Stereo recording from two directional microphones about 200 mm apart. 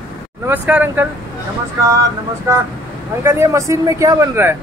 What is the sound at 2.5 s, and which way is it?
Speech, 15° right (ahead or behind).